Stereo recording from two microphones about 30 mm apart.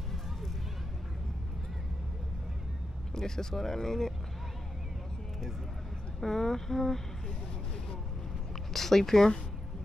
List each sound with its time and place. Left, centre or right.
3.2 s speech: centre
6.2 s speech: centre
8.7 s speech: centre